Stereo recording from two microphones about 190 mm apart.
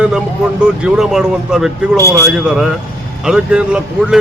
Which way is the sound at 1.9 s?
15° right (ahead or behind).